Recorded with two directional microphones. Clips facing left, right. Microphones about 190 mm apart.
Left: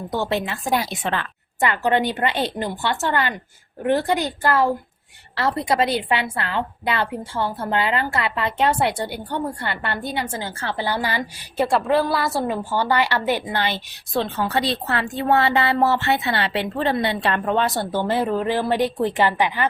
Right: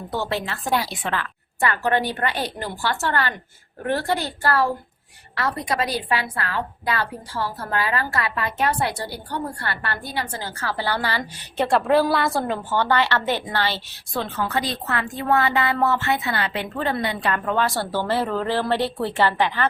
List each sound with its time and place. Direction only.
0.1 s a woman's voice: 20° left (ahead or behind)
5.3 s a woman's voice: 30° left (ahead or behind)
11.6 s a woman's voice: centre (ahead or behind); by 14.3 s 20° left (ahead or behind)
14.3 s a woman's voice: 30° left (ahead or behind); by 19.6 s 15° left (ahead or behind)